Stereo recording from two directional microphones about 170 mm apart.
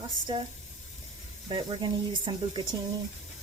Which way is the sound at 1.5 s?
30° right (ahead or behind).